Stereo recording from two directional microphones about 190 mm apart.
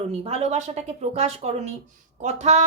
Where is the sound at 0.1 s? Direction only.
35° right (ahead or behind).